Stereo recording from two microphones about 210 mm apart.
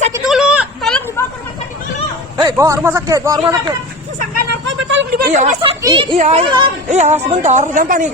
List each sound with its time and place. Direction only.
0.3 s a sound: 5° right (ahead or behind)
2.4 s a man's voice: 15° right (ahead or behind)
4.2 s vehicle: 45° right (ahead or behind)
4.9 s a sound: 55° right (ahead or behind)
5.3 s speech: 35° right (ahead or behind)
5.8 s speech: 20° right (ahead or behind); by 8.1 s 40° right (ahead or behind)